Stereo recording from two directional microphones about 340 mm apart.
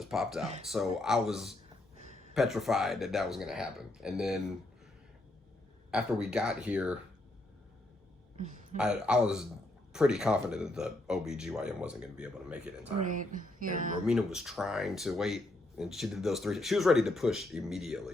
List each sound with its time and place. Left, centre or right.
0.0 s speech: centre
5.9 s speech: centre
8.8 s speech: centre
13.0 s speech: right
14.0 s speech: centre